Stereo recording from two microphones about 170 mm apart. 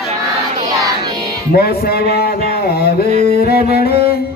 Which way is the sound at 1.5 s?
65° left (ahead or behind).